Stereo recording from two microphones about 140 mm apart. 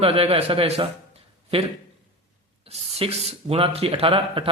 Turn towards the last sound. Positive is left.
turn(degrees=-40)  # may be behind; listen again after turning